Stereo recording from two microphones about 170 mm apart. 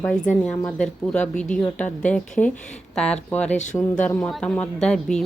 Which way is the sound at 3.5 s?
45° left (ahead or behind).